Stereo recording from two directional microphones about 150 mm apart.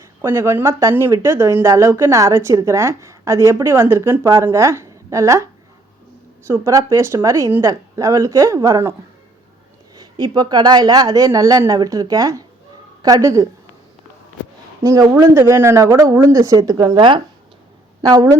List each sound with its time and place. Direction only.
0.2 s speech: 15° right (ahead or behind)
6.5 s speech: 20° right (ahead or behind)
14.8 s speech: 20° right (ahead or behind)
18.0 s speech: 25° right (ahead or behind)